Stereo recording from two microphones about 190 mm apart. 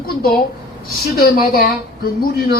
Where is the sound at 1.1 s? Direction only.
50° left (ahead or behind).